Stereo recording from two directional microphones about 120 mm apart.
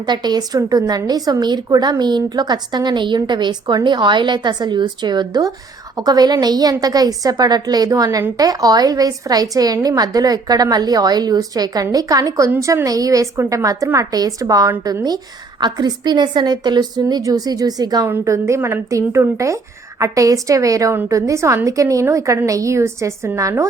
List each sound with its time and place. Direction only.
0.0 s a woman's voice: 35° right (ahead or behind)